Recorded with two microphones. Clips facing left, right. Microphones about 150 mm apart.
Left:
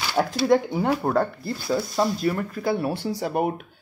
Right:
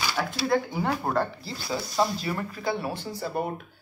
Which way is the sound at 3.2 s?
90° left.